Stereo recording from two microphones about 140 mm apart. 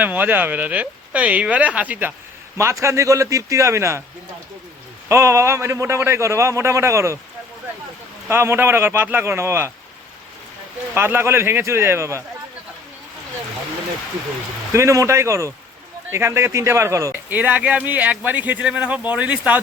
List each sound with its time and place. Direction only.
0.0 s a man's voice: 15° right (ahead or behind)
5.0 s a man's voice: 20° right (ahead or behind)
8.3 s speech: 15° right (ahead or behind)
10.9 s speech: 15° right (ahead or behind)
14.7 s a man's voice: 20° right (ahead or behind)